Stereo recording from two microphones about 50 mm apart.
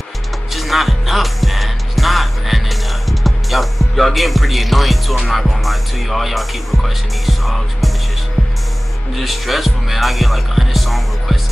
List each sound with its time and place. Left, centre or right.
0.5 s music: centre
9.1 s speech: centre